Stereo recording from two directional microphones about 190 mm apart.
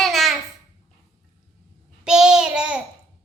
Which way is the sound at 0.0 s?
Centre (ahead or behind).